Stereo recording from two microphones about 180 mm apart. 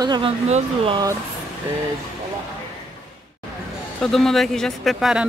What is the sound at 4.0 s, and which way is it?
Speech, centre (ahead or behind).